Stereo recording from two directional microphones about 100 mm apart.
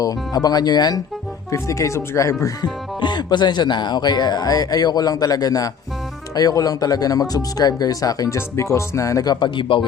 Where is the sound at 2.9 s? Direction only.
50° left (ahead or behind).